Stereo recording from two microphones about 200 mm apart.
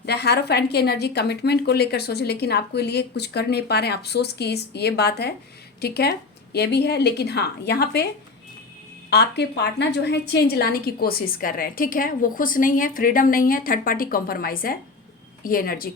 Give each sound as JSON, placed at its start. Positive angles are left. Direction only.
{"t": 0.0, "sound": "a woman's voice", "side_deg": 55}
{"t": 9.0, "sound": "a woman's voice", "side_deg": 55}